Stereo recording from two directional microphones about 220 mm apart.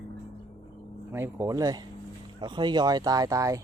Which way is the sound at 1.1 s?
10° right (ahead or behind).